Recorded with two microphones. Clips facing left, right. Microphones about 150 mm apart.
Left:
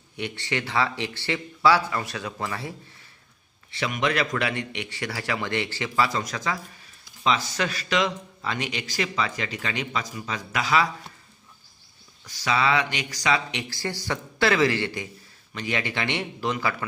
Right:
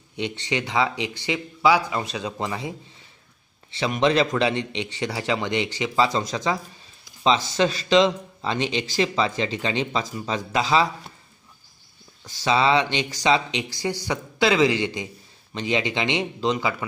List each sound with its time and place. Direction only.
0.1 s speech: 20° right (ahead or behind)
3.7 s a man's voice: 30° right (ahead or behind)
12.3 s a man's voice: 25° right (ahead or behind)